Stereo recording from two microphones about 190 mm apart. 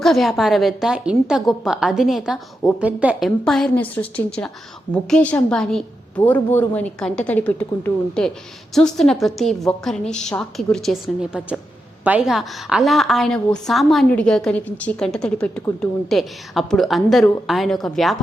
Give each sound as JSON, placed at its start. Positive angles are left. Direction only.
{"t": 0.0, "sound": "a woman's voice", "side_deg": 0}